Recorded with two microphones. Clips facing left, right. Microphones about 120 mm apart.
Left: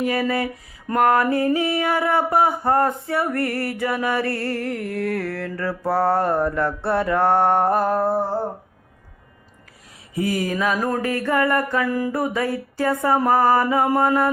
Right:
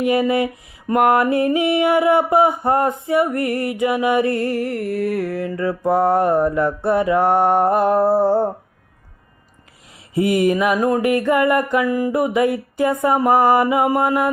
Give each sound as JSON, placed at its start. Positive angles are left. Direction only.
{"t": 0.0, "sound": "music", "side_deg": -15}
{"t": 7.9, "sound": "humming", "side_deg": -30}
{"t": 10.2, "sound": "music", "side_deg": -25}